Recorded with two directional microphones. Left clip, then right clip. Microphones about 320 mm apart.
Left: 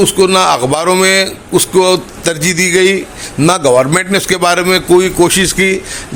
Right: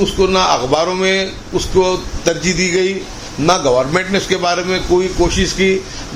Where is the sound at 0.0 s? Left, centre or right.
Left.